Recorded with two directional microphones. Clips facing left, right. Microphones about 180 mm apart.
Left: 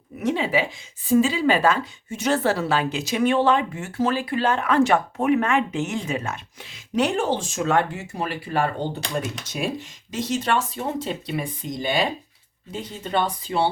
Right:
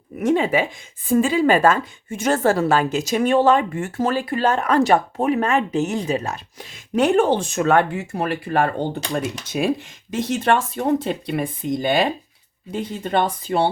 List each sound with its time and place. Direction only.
0.2 s a woman's voice: 50° right (ahead or behind)
10.1 s a woman's voice: 55° right (ahead or behind)